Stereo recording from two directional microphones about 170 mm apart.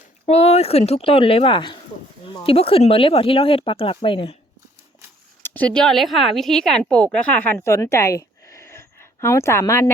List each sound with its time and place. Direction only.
0.3 s speech: 40° left (ahead or behind)
5.4 s a woman's voice: 10° left (ahead or behind)